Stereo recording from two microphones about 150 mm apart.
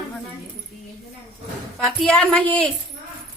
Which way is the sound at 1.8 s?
5° left (ahead or behind).